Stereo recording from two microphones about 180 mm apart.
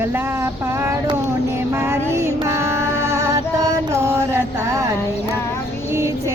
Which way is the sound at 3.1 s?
15° right (ahead or behind).